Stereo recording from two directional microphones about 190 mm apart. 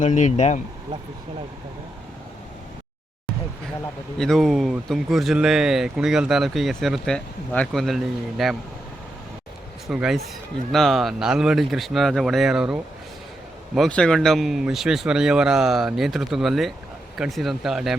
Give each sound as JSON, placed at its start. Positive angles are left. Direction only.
{"t": 0.0, "sound": "speech", "side_deg": 40}
{"t": 4.2, "sound": "speech", "side_deg": 0}
{"t": 9.8, "sound": "speech", "side_deg": 0}